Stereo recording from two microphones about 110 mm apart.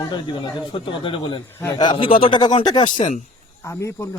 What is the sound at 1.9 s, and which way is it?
Speech, 55° left (ahead or behind).